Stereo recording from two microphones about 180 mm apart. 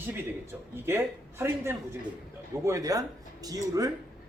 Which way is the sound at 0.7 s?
15° right (ahead or behind).